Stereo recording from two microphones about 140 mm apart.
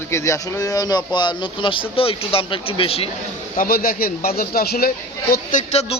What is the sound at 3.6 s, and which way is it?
Speech, 90° left.